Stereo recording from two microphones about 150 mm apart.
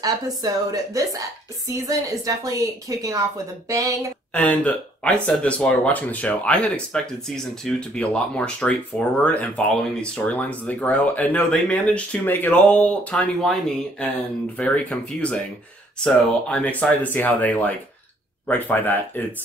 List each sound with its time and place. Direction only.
0.0 s a woman's voice: 25° right (ahead or behind)
4.3 s speech: 10° left (ahead or behind)